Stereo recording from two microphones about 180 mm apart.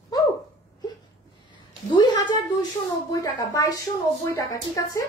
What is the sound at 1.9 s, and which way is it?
A woman's voice, 25° left (ahead or behind).